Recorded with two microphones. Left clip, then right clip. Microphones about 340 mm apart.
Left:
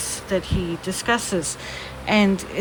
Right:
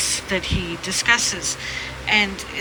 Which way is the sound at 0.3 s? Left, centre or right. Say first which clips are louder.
Right 1 dB; centre.